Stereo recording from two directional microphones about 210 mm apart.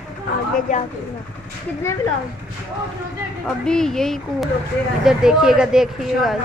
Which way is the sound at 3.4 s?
5° left (ahead or behind).